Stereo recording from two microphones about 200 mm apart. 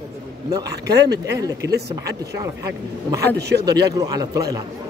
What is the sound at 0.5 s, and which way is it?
Speech, 20° right (ahead or behind).